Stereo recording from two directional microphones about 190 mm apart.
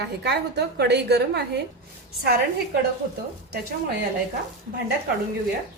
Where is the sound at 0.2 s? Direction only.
60° right (ahead or behind).